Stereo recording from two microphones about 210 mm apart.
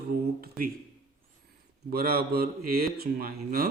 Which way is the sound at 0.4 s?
45° right (ahead or behind).